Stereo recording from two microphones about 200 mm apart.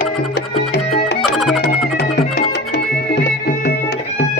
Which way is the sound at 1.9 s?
50° left (ahead or behind).